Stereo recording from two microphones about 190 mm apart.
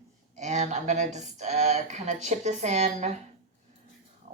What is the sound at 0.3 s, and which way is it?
Speech, 40° right (ahead or behind).